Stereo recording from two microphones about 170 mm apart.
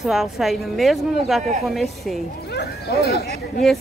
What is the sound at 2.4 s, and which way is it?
Speech, 70° left (ahead or behind).